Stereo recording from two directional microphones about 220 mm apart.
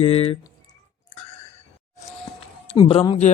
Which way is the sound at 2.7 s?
25° left (ahead or behind).